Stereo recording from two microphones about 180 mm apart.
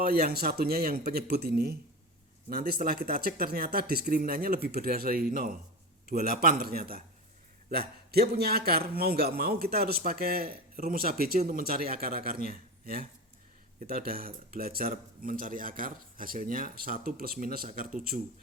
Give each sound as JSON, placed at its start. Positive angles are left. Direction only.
{"t": 0.0, "sound": "a man's voice", "side_deg": -55}